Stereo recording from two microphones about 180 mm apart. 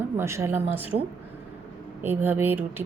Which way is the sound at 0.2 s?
15° right (ahead or behind).